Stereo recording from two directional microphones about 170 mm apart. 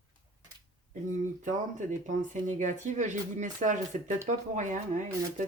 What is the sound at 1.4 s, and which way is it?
Speech, 45° right (ahead or behind).